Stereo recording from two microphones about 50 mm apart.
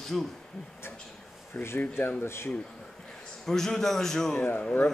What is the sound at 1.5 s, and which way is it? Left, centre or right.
Speech, left.